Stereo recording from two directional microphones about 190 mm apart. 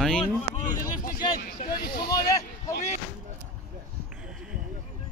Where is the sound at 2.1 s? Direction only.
20° left (ahead or behind).